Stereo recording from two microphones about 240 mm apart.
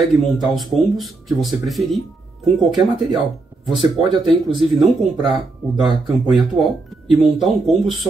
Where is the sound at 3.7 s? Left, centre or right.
Centre.